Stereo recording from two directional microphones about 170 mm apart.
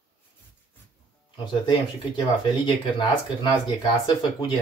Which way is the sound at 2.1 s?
25° left (ahead or behind).